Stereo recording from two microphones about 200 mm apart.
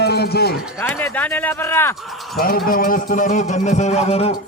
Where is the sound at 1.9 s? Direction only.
Centre (ahead or behind).